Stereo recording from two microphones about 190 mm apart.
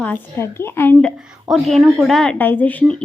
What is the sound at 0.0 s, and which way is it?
Speech, 10° left (ahead or behind).